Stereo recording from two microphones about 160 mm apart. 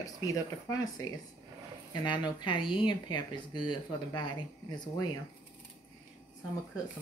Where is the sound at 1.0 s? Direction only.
20° left (ahead or behind).